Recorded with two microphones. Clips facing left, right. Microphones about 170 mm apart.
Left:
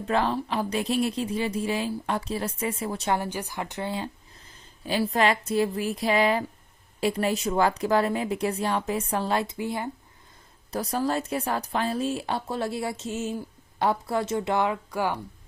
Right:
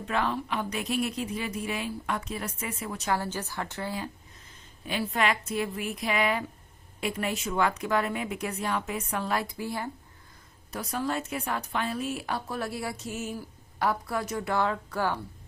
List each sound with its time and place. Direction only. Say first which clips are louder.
0.0 s speech: left 4 dB; 30° left (ahead or behind)
3.2 s speech: left 2 dB; 15° left (ahead or behind)
10.7 s a woman's voice: left 4 dB; 35° left (ahead or behind); by 15.2 s 15° left (ahead or behind)